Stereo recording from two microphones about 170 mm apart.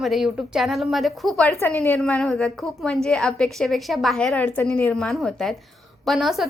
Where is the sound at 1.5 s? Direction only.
15° left (ahead or behind).